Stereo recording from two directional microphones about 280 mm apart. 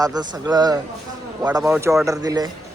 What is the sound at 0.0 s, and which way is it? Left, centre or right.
A man's voice, centre.